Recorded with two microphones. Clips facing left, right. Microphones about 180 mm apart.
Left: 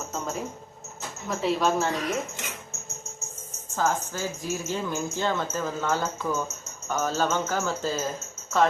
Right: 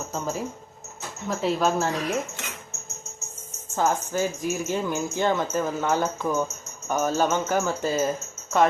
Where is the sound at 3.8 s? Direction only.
15° right (ahead or behind).